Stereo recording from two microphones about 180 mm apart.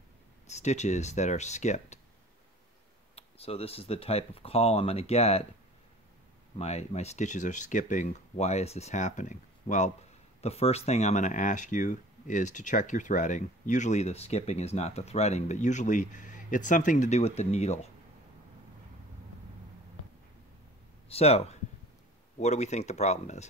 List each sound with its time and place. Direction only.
0.5 s speech: 40° left (ahead or behind)
3.2 s speech: 35° left (ahead or behind)
6.6 s speech: 35° left (ahead or behind)
21.1 s speech: 35° left (ahead or behind)